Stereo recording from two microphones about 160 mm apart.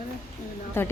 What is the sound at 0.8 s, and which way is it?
Speech, 15° left (ahead or behind).